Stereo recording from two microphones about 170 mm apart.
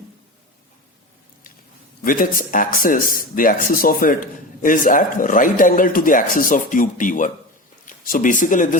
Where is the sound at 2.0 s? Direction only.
55° left (ahead or behind).